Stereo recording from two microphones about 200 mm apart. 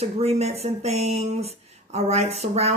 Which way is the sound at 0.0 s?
30° right (ahead or behind).